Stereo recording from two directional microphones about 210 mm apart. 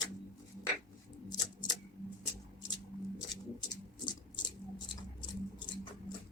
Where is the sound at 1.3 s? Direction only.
20° left (ahead or behind).